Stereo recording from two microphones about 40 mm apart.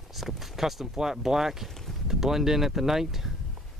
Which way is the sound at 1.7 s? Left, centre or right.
Centre.